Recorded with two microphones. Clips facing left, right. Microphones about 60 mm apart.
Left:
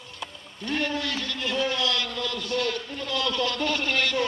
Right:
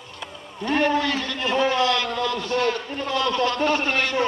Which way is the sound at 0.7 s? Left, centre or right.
Right.